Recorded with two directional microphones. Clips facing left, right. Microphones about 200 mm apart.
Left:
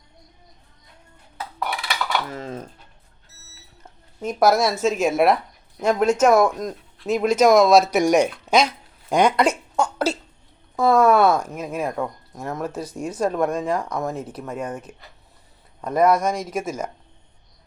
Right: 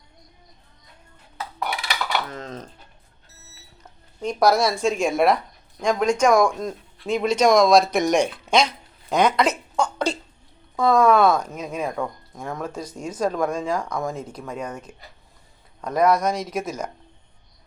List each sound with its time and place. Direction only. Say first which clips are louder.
2.3 s speech: left 3 dB; 10° left (ahead or behind)
4.2 s speech: left 1 dB; 5° left (ahead or behind)